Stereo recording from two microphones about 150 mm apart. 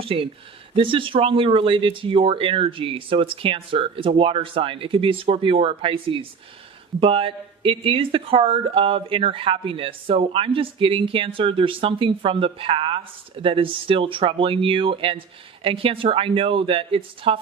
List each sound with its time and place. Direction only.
0.0 s speech: 40° right (ahead or behind)